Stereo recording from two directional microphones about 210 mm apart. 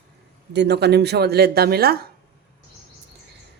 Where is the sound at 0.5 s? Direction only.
55° right (ahead or behind).